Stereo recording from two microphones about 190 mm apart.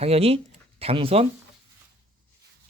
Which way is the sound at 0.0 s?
30° right (ahead or behind).